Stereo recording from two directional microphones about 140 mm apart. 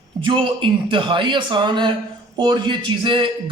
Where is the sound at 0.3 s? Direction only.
35° right (ahead or behind).